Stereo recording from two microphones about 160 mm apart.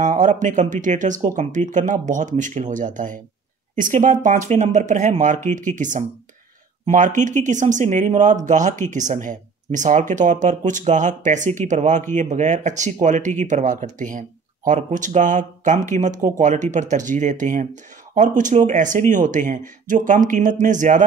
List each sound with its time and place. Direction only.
0.0 s speech: 50° right (ahead or behind)